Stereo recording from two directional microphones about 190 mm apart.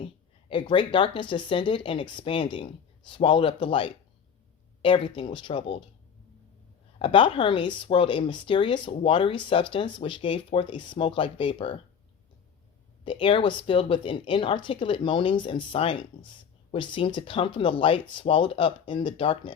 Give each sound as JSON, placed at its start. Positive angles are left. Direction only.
{"t": 0.0, "sound": "speech", "side_deg": 25}
{"t": 7.0, "sound": "speech", "side_deg": 25}
{"t": 13.1, "sound": "speech", "side_deg": 25}